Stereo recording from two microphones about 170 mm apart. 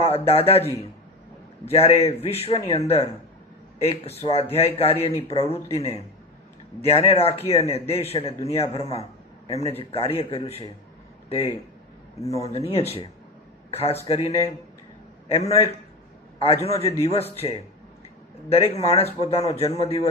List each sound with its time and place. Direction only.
0.0 s speech: 35° left (ahead or behind)
12.4 s speech: 40° left (ahead or behind)